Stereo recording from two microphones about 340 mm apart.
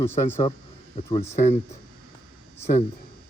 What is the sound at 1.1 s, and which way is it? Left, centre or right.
Speech, centre.